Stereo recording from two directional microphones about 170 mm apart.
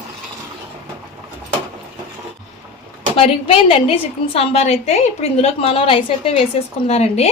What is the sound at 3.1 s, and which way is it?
A woman's voice, 35° left (ahead or behind).